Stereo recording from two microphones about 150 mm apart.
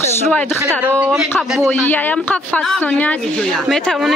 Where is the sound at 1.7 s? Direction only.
10° left (ahead or behind).